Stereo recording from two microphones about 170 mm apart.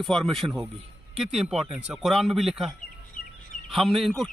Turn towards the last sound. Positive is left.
turn(degrees=0)  # may be behind; listen again after turning